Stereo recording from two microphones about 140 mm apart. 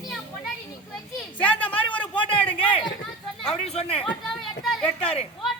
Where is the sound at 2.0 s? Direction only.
40° left (ahead or behind).